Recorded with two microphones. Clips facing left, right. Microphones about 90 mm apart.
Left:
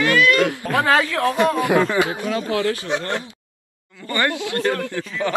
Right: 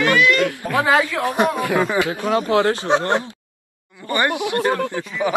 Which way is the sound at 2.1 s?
55° right (ahead or behind).